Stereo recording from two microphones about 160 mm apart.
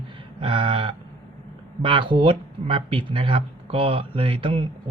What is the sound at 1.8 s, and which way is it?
Speech, 30° right (ahead or behind).